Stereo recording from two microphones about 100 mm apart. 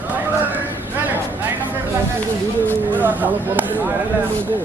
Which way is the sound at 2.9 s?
20° right (ahead or behind).